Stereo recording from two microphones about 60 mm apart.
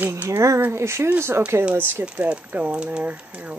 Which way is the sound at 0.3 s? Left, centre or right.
Right.